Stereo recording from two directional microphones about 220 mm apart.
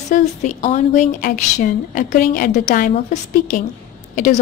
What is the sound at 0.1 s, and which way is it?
A woman's voice, 35° left (ahead or behind).